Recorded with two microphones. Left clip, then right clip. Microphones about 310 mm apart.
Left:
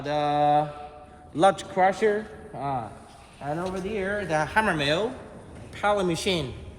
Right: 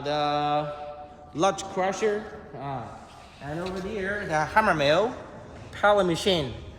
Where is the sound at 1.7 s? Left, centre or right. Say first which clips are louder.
Left 4 dB; centre.